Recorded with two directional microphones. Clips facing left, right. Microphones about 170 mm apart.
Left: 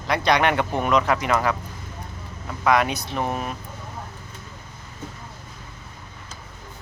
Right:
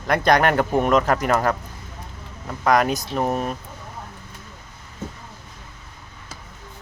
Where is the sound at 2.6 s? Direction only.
45° right (ahead or behind).